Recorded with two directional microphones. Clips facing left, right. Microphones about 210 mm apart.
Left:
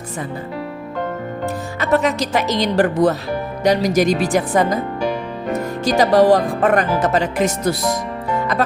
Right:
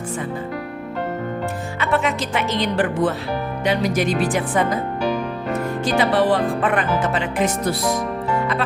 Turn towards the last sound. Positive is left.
turn(degrees=40)  # may be behind; listen again after turning